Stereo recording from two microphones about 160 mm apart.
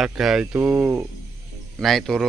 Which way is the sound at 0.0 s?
Centre (ahead or behind).